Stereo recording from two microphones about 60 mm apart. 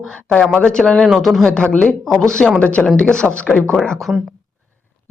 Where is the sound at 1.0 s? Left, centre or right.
Centre; by 3.8 s left.